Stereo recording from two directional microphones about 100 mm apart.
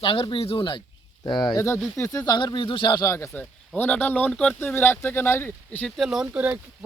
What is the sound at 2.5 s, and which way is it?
Speech, 55° left (ahead or behind).